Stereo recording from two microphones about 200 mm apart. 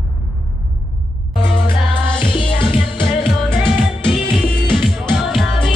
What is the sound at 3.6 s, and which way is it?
Music, 5° left (ahead or behind).